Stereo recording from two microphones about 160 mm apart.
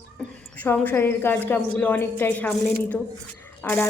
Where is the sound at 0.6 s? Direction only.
10° left (ahead or behind).